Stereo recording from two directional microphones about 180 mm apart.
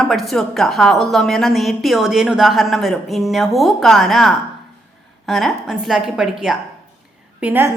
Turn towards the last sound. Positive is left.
turn(degrees=-10)  # may be behind; listen again after turning